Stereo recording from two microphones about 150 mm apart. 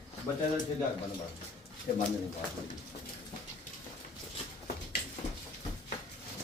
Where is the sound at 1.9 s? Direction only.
50° left (ahead or behind).